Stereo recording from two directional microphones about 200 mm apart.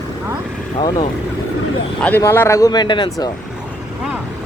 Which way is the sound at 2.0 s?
10° left (ahead or behind).